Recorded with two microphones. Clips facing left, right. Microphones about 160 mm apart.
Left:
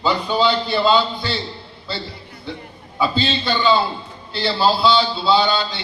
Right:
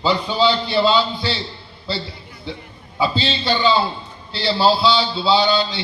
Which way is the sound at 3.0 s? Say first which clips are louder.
Even; 45° left (ahead or behind).